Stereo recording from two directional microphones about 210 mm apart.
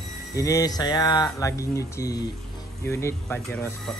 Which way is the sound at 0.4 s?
15° left (ahead or behind).